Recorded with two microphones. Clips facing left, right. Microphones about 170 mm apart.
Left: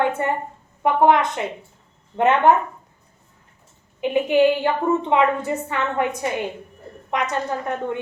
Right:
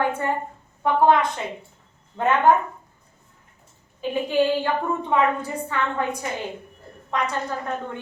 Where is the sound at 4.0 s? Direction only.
20° left (ahead or behind).